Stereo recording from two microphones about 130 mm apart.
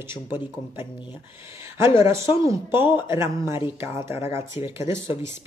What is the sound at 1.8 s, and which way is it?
Speech, 20° right (ahead or behind).